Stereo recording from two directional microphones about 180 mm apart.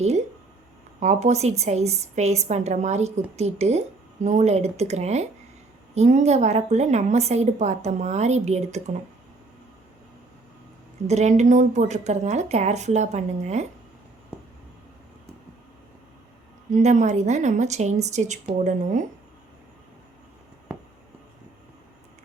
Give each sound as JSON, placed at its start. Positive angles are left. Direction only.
{"t": 0.9, "sound": "a woman's voice", "side_deg": -40}
{"t": 11.0, "sound": "a woman's voice", "side_deg": -40}
{"t": 16.7, "sound": "a woman's voice", "side_deg": -40}